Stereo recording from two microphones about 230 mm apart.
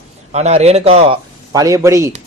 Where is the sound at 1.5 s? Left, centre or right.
Centre.